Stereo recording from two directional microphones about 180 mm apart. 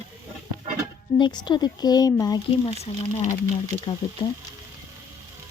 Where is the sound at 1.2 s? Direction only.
25° left (ahead or behind).